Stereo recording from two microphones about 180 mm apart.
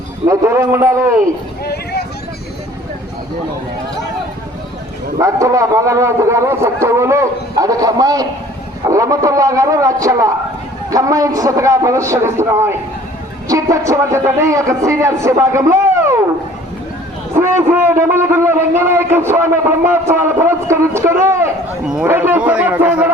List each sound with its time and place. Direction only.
0.3 s a man's voice: 15° right (ahead or behind)
1.6 s a sound: 65° left (ahead or behind)
5.1 s a man's voice: 15° right (ahead or behind)
17.3 s a man's voice: 15° right (ahead or behind)
21.8 s a man's voice: 5° right (ahead or behind)